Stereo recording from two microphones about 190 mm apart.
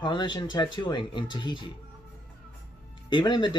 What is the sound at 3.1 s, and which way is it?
Speech, 25° left (ahead or behind).